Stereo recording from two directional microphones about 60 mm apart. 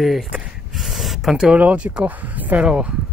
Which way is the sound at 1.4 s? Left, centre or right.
Centre.